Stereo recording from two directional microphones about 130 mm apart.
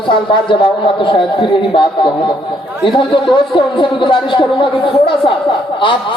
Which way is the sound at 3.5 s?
40° left (ahead or behind).